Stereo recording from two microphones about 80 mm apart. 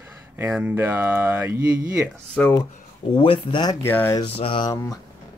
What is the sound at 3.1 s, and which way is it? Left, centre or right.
Speech, left.